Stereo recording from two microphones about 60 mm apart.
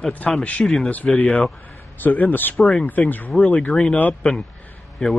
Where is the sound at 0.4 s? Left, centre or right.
Left.